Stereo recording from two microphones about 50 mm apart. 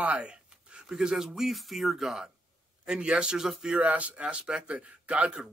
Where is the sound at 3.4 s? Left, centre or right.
Centre.